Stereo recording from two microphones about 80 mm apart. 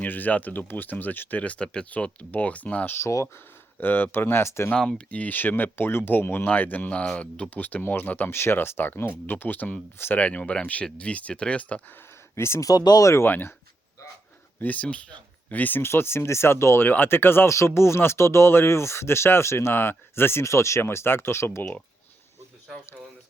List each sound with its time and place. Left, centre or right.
0.0 s speech: left
2.9 s speech: left
3.8 s speech: left
4.7 s speech: centre
12.4 s speech: left
12.6 s speech: left
13.1 s speech: left
14.6 s speech: centre
21.6 s speech: centre